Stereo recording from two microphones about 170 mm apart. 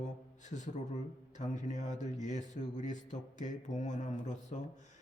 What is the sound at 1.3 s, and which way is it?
Speech, 45° left (ahead or behind).